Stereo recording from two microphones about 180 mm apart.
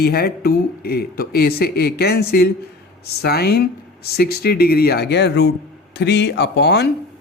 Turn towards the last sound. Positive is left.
turn(degrees=70)  # may be behind; listen again after turning